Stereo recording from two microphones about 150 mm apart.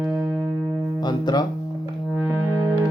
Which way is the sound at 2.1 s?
10° right (ahead or behind).